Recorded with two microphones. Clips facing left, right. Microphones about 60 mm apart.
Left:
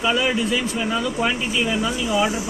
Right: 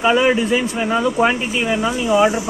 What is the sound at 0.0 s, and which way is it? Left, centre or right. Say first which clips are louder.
Speech: right 6 dB; right.